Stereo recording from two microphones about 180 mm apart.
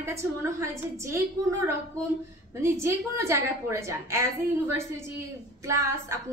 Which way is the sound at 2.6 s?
15° right (ahead or behind).